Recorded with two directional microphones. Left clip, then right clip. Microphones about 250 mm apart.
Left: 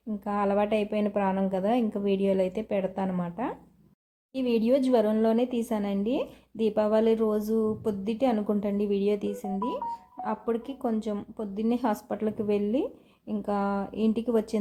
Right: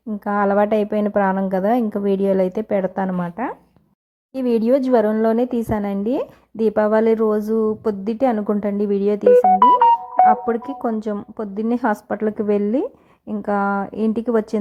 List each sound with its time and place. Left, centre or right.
0.3 s speech: right